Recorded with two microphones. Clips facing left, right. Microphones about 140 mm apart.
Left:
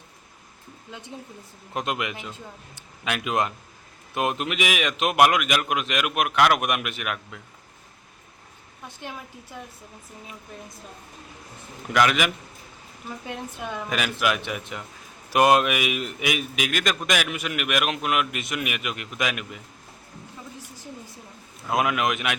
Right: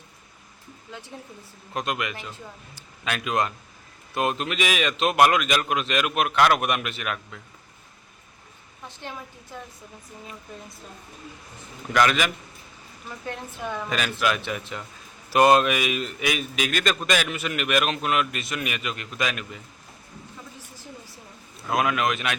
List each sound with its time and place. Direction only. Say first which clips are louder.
1.7 s a man's voice: even; 20° left (ahead or behind)
11.9 s a man's voice: even; 10° left (ahead or behind)
21.7 s a man's voice: even; 20° left (ahead or behind)